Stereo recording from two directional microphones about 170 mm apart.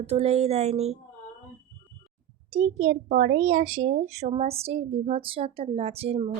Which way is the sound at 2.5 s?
40° right (ahead or behind).